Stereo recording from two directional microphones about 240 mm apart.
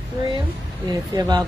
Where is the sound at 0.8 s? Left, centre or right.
Centre.